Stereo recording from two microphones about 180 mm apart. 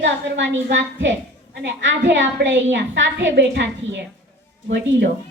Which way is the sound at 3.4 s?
65° right (ahead or behind).